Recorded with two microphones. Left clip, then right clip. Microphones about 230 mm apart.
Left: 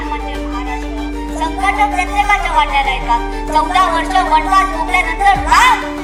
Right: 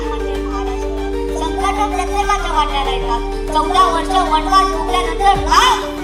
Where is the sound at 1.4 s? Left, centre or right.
Left.